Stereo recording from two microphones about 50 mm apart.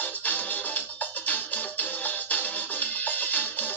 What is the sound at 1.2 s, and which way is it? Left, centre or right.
Music, left.